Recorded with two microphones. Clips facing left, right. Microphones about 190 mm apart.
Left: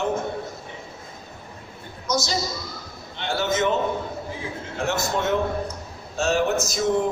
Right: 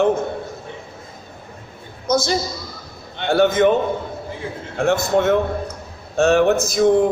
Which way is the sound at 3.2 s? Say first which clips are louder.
Right 9 dB; 55° right (ahead or behind).